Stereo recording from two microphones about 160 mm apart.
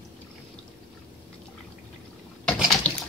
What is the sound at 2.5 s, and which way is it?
Water, 5° left (ahead or behind).